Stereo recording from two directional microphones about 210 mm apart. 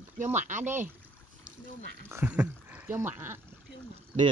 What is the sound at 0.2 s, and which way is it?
Speech, 35° right (ahead or behind).